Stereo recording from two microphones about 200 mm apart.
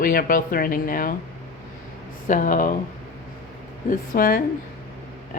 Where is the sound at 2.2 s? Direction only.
40° left (ahead or behind).